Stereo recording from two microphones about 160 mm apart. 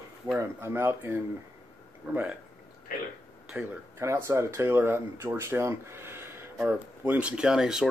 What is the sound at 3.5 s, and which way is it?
Speech, 10° right (ahead or behind).